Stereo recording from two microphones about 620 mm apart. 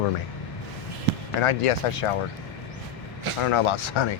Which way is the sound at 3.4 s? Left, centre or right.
Left.